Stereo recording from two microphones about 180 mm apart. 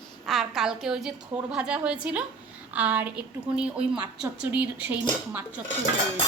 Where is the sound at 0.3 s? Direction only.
Centre (ahead or behind).